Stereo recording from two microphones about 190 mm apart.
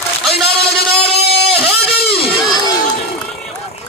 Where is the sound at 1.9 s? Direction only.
55° left (ahead or behind).